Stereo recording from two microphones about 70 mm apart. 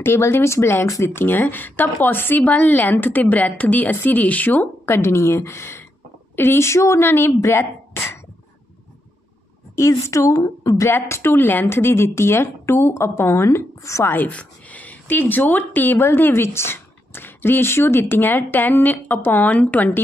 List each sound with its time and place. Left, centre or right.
0.0 s speech: left
4.8 s speech: left
9.8 s a woman's voice: left
10.3 s a woman's voice: left
11.1 s speech: left
11.4 s speech: left
14.1 s speech: left